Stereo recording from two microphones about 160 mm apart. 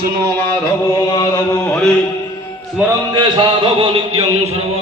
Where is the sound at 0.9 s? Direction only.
30° left (ahead or behind).